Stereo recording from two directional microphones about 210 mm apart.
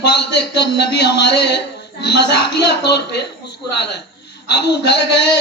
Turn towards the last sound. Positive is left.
turn(degrees=55)  # may be behind; listen again after turning